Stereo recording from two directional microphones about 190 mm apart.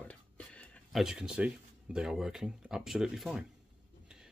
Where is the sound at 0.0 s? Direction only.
5° left (ahead or behind).